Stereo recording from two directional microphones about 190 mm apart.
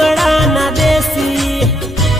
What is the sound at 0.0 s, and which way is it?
Music, centre (ahead or behind).